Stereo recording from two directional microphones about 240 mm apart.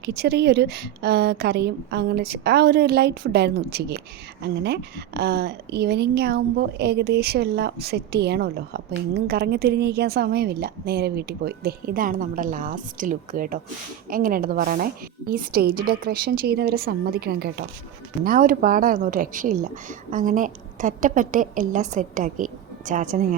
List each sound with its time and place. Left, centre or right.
0.0 s a woman's voice: right